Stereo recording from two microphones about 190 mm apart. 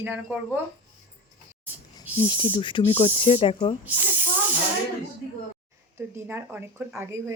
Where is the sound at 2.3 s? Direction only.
25° left (ahead or behind).